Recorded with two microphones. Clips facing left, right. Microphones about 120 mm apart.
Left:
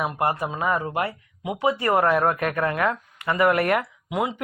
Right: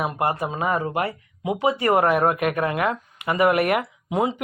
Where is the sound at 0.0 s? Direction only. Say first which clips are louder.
Right 1 dB; 20° right (ahead or behind).